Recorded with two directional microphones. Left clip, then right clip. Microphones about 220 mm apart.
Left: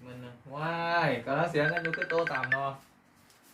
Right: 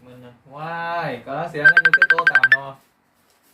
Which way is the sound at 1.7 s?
40° right (ahead or behind).